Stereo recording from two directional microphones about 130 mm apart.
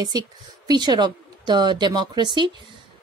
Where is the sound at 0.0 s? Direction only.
30° right (ahead or behind).